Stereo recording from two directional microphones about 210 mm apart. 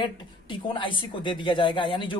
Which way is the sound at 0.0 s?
25° left (ahead or behind).